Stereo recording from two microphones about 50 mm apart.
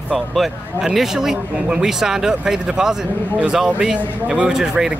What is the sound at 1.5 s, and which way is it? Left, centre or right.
Speech, centre.